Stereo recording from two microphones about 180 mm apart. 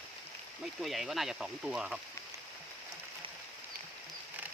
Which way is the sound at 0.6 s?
Centre (ahead or behind).